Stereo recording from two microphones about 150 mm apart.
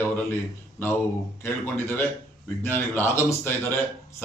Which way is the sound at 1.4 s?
15° left (ahead or behind).